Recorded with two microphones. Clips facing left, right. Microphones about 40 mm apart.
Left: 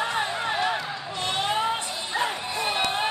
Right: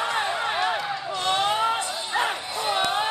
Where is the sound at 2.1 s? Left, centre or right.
Right.